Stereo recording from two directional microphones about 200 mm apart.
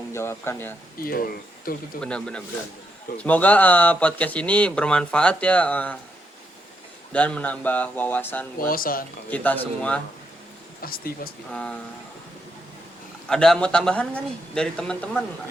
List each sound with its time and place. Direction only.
0.1 s speech: 10° left (ahead or behind)
1.0 s speech: 45° left (ahead or behind)
2.0 s a man's voice: 5° left (ahead or behind)
7.1 s speech: 5° left (ahead or behind)
8.7 s speech: 45° left (ahead or behind)
9.3 s speech: 10° left (ahead or behind)
10.8 s speech: 50° left (ahead or behind)
11.5 s a man's voice: 5° left (ahead or behind)
13.2 s a man's voice: 5° left (ahead or behind)